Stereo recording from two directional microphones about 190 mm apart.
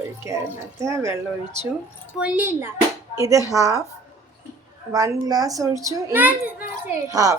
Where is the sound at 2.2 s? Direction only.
5° right (ahead or behind).